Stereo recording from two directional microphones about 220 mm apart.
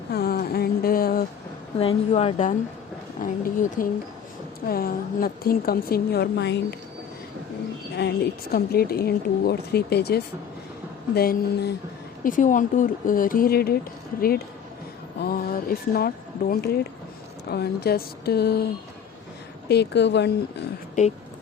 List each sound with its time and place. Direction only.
0.1 s a sound: 45° left (ahead or behind)
1.8 s a woman's voice: 25° left (ahead or behind); by 6.7 s 50° left (ahead or behind)
7.9 s a woman's voice: 50° left (ahead or behind)
19.6 s a woman's voice: 50° left (ahead or behind)
21.0 s a woman's voice: 35° left (ahead or behind)